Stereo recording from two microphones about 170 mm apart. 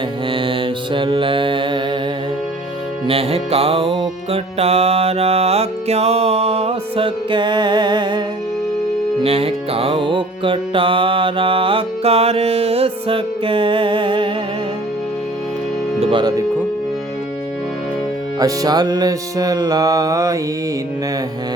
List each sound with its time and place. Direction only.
0.3 s mantra: 30° right (ahead or behind)
3.1 s music: 35° right (ahead or behind)
9.2 s music: 35° right (ahead or behind)
16.0 s music: 30° right (ahead or behind)
18.3 s music: 20° right (ahead or behind)